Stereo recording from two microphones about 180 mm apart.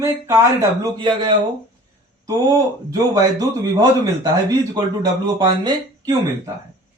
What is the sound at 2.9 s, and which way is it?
Speech, 20° right (ahead or behind).